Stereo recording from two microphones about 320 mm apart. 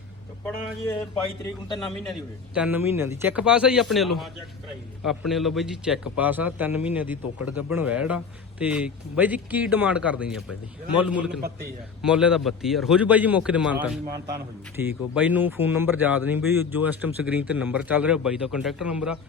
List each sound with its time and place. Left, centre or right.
0.4 s a man's voice: centre
2.6 s a man's voice: centre
5.3 s a man's voice: centre